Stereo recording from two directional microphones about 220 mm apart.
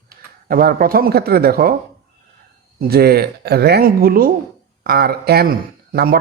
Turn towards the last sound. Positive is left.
turn(degrees=-45)  # may be behind; listen again after turning